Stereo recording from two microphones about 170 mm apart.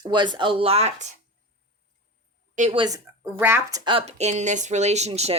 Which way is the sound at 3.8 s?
30° right (ahead or behind).